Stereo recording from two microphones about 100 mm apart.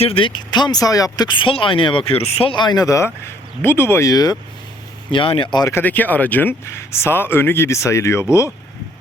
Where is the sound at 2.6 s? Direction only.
40° left (ahead or behind); by 4.1 s 25° left (ahead or behind).